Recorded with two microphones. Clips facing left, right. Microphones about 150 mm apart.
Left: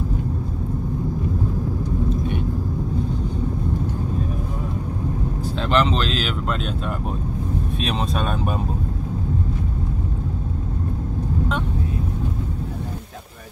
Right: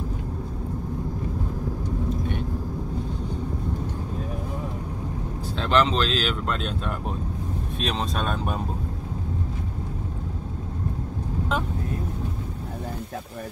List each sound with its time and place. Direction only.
5.6 s speech: 5° left (ahead or behind)
7.8 s speech: 5° left (ahead or behind)